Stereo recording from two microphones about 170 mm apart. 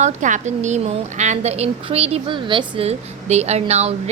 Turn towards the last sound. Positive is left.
turn(degrees=-40)  # may be behind; listen again after turning